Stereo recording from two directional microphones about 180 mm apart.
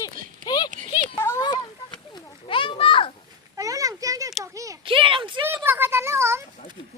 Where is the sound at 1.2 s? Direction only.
15° left (ahead or behind).